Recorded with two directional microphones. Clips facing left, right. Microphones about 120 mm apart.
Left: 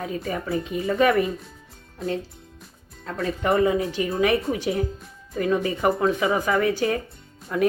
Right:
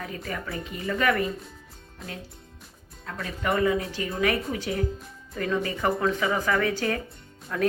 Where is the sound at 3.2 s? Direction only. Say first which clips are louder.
Left 5 dB; 30° left (ahead or behind).